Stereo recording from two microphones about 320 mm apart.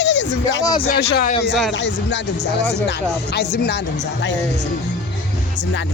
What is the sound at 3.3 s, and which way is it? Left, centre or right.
Speech, left.